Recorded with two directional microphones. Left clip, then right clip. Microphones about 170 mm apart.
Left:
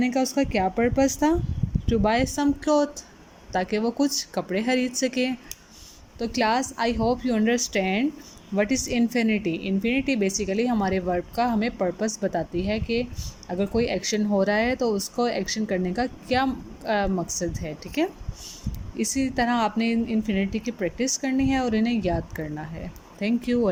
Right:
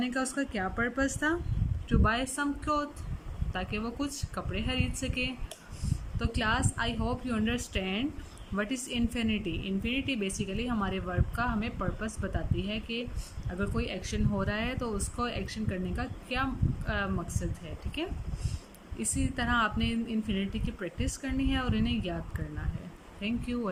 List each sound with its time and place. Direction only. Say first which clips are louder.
0.0 s a woman's voice: left 8 dB; 20° left (ahead or behind)
18.9 s a woman's voice: left 9 dB; 25° left (ahead or behind)